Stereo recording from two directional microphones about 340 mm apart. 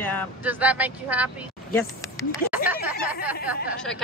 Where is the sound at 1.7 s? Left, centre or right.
Centre.